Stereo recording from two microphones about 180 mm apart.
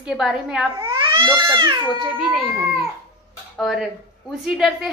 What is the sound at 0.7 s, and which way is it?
Speech, 25° right (ahead or behind).